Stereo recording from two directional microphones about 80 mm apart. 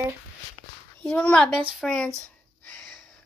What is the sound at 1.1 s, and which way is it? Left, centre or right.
Speech, centre.